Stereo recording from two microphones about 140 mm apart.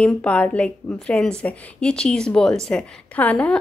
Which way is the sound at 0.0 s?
10° left (ahead or behind).